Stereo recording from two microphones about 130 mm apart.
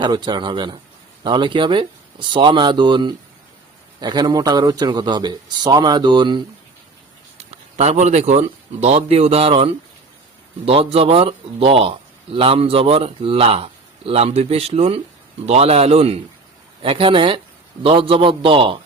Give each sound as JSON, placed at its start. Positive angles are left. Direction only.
{"t": 0.0, "sound": "a man's voice", "side_deg": -35}
{"t": 7.3, "sound": "speech", "side_deg": -55}
{"t": 10.7, "sound": "a man's voice", "side_deg": -50}